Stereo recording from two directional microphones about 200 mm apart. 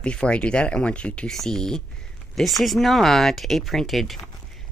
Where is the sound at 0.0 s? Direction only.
5° left (ahead or behind).